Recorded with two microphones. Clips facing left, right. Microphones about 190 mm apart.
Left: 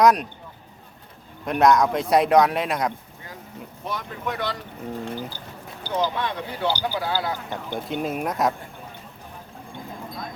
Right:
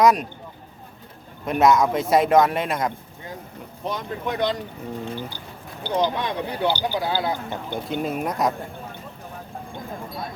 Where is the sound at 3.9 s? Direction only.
20° right (ahead or behind).